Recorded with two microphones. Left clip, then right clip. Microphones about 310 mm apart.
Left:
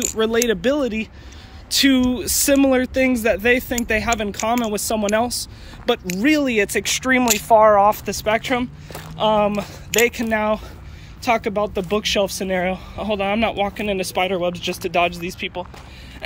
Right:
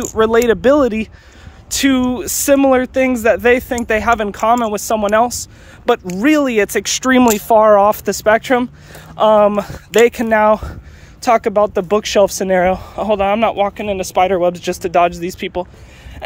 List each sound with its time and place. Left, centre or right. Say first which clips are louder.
0.2 s speech: right 7 dB; centre